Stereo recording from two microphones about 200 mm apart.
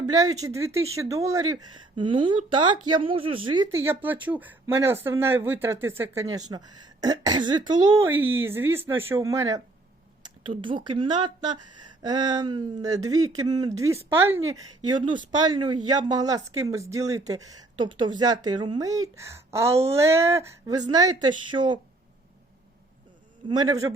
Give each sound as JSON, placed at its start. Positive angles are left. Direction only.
{"t": 0.1, "sound": "speech", "side_deg": -15}
{"t": 10.2, "sound": "a sound", "side_deg": -25}
{"t": 10.8, "sound": "speech", "side_deg": -25}
{"t": 23.5, "sound": "speech", "side_deg": -20}